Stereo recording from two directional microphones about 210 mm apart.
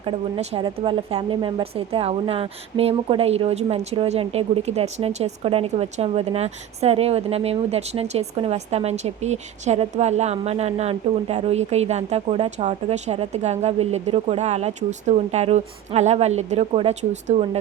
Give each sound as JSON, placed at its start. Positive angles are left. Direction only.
{"t": 0.0, "sound": "speech", "side_deg": -25}